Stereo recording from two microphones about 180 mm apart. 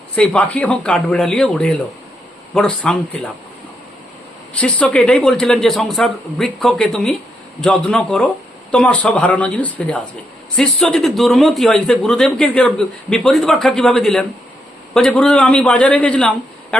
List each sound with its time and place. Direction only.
0.2 s a man's voice: 5° left (ahead or behind)
4.6 s a man's voice: 5° left (ahead or behind)